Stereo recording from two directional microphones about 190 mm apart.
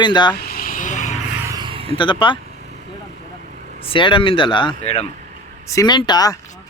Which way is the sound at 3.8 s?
30° left (ahead or behind).